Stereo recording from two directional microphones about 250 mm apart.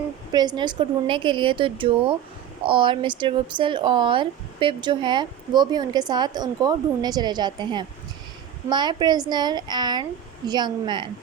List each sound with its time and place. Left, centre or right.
0.3 s a woman's voice: centre